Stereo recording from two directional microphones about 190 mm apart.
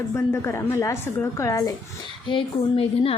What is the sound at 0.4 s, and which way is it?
A woman's voice, 15° left (ahead or behind).